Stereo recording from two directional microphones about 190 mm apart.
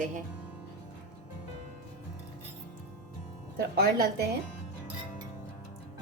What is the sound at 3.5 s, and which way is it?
Speech, 55° right (ahead or behind).